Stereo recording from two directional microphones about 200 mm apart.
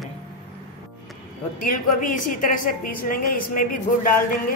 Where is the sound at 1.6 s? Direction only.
45° left (ahead or behind).